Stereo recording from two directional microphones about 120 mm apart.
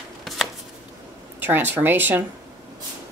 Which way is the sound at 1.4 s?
15° right (ahead or behind).